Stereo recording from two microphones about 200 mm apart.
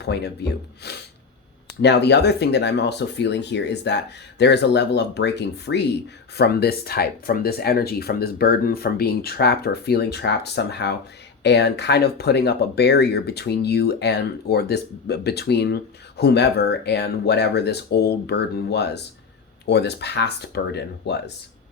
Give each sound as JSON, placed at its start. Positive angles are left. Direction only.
{"t": 0.0, "sound": "speech", "side_deg": 55}